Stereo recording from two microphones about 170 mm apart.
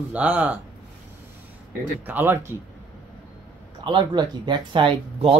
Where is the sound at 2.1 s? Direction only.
10° right (ahead or behind).